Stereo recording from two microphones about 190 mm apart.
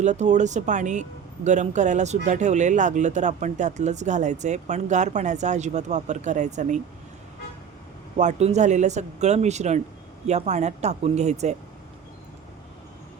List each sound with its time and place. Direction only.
0.0 s speech: 40° right (ahead or behind)
8.1 s speech: 40° right (ahead or behind)